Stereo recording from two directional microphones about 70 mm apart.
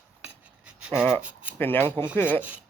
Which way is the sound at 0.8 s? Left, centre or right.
Centre.